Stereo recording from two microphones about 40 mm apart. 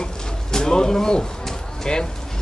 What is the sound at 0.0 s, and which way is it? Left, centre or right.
Bird, centre.